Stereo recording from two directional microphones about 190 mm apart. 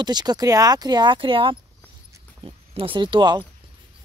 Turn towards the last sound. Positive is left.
turn(degrees=-25)  # may be behind; listen again after turning